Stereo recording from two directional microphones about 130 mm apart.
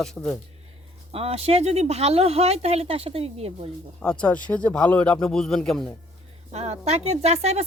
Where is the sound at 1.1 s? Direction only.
50° right (ahead or behind).